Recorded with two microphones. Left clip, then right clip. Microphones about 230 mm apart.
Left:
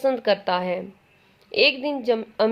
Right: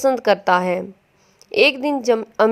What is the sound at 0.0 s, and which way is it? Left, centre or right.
A woman's voice, right.